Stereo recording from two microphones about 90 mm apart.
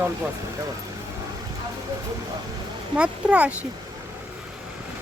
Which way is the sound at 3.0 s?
15° right (ahead or behind).